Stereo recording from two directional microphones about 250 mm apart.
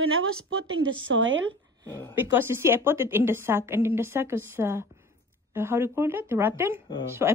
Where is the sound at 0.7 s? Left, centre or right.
Right.